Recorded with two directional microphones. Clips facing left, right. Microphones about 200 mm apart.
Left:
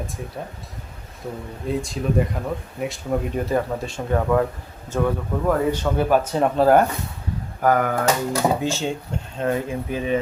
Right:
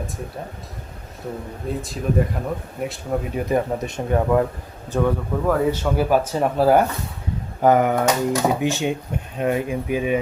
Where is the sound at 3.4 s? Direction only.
15° right (ahead or behind).